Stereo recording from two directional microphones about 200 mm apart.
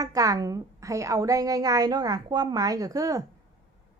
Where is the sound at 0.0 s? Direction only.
15° right (ahead or behind).